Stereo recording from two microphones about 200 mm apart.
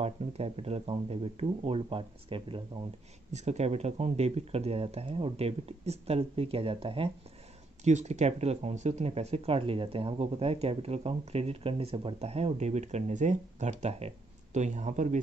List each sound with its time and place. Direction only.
0.0 s speech: 30° right (ahead or behind)